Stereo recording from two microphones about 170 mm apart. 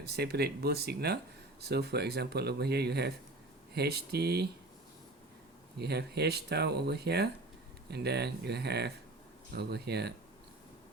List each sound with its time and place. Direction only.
0.0 s speech: 70° right (ahead or behind)
5.8 s speech: 75° right (ahead or behind)